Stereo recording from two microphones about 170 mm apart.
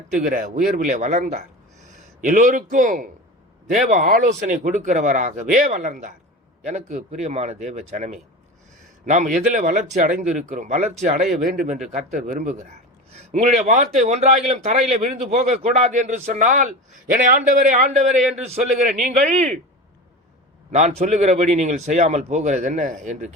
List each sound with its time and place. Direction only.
0.1 s a man's voice: 50° right (ahead or behind)
20.7 s a man's voice: 40° right (ahead or behind)